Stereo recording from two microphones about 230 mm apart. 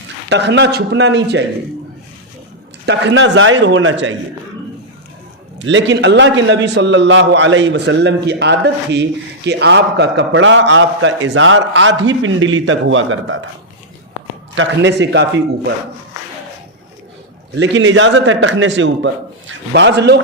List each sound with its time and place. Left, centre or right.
0.3 s a man's voice: right
2.8 s a man's voice: right
5.5 s a man's voice: right
14.5 s a man's voice: right
17.6 s a man's voice: right